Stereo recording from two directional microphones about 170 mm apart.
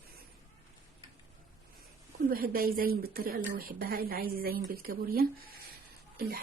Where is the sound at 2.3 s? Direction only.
60° right (ahead or behind).